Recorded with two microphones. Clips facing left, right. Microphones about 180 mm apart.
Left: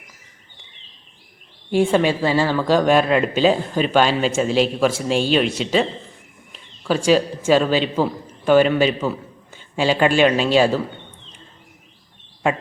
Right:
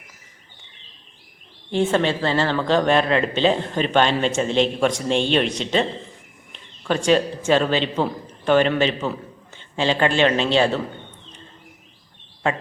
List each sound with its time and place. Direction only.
1.7 s a man's voice: 10° left (ahead or behind)